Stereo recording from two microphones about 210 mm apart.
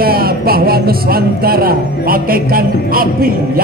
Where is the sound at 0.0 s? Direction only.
45° right (ahead or behind).